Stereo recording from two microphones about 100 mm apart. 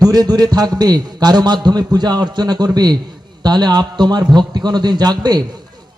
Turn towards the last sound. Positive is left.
turn(degrees=-45)  # may be behind; listen again after turning